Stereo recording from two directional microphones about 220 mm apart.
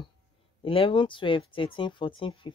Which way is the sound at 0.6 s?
25° left (ahead or behind).